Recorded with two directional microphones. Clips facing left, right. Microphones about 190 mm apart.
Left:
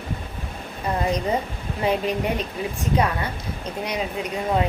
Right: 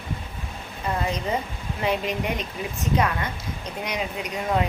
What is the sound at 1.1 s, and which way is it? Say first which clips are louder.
A woman's voice: left 4 dB; 35° left (ahead or behind).